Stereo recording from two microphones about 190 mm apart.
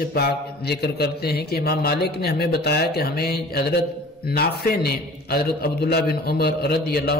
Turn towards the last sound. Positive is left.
turn(degrees=55)  # may be behind; listen again after turning